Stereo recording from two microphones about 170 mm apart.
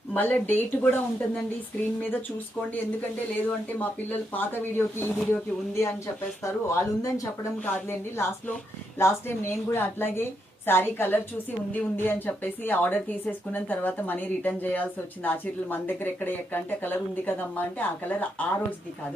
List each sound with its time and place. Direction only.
0.1 s speech: 10° left (ahead or behind)
3.4 s speech: 10° left (ahead or behind)